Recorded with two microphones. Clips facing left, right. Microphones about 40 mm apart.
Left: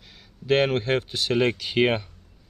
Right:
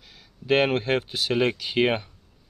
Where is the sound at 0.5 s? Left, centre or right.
Centre.